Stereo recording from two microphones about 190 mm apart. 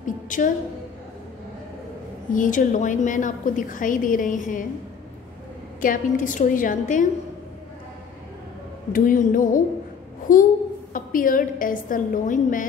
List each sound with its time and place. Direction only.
0.0 s a sound: 45° left (ahead or behind)
2.3 s a woman's voice: 45° left (ahead or behind)
5.8 s a woman's voice: 45° left (ahead or behind)
8.9 s a woman's voice: 45° left (ahead or behind)